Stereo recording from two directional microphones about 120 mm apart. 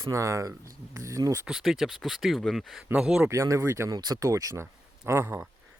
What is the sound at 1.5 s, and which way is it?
Speech, 5° right (ahead or behind).